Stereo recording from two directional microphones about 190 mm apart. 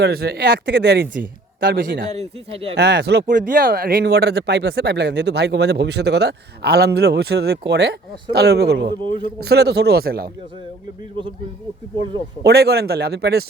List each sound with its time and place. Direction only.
0.0 s speech: 55° right (ahead or behind)
1.7 s a man's voice: 65° right (ahead or behind)
2.1 s a man's voice: 30° right (ahead or behind)
2.7 s speech: 60° right (ahead or behind)
3.4 s speech: 50° right (ahead or behind)
12.4 s speech: 60° right (ahead or behind)